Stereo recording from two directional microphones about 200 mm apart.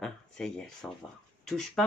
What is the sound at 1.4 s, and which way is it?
Speech, 5° left (ahead or behind).